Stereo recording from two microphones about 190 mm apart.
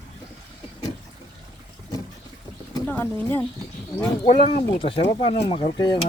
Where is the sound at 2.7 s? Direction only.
10° left (ahead or behind).